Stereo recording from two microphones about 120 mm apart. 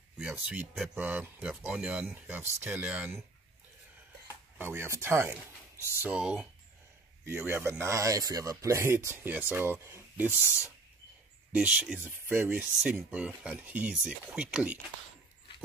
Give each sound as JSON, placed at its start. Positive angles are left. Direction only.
{"t": 0.2, "sound": "speech", "side_deg": -10}
{"t": 4.6, "sound": "speech", "side_deg": -20}
{"t": 6.0, "sound": "speech", "side_deg": -10}
{"t": 7.2, "sound": "speech", "side_deg": -20}
{"t": 11.5, "sound": "speech", "side_deg": -10}